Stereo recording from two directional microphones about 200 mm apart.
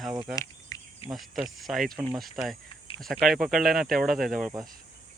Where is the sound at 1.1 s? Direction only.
Centre (ahead or behind).